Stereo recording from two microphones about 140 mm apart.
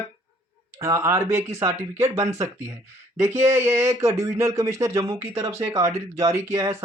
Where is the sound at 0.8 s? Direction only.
20° right (ahead or behind).